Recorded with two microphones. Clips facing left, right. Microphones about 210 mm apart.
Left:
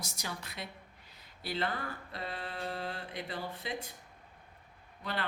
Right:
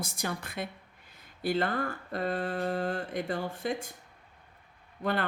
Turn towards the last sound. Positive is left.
turn(degrees=-50)  # may be behind; listen again after turning